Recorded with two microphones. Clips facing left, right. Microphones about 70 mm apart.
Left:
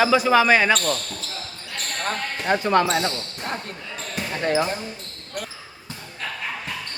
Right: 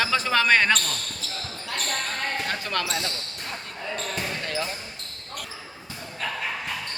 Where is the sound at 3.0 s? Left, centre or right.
Left.